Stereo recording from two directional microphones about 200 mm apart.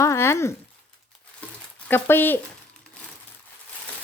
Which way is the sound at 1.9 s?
10° left (ahead or behind).